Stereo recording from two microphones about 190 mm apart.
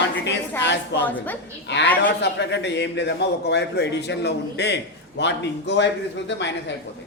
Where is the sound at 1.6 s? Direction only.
65° left (ahead or behind).